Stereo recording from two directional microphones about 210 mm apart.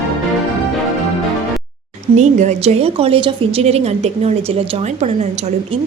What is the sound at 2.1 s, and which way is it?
A woman's voice, 35° right (ahead or behind).